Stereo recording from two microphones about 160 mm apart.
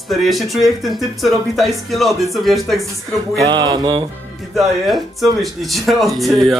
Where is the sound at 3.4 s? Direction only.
25° right (ahead or behind).